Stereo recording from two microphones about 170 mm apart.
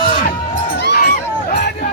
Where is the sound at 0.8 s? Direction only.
70° left (ahead or behind).